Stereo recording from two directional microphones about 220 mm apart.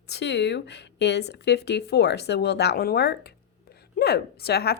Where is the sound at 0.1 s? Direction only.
50° left (ahead or behind).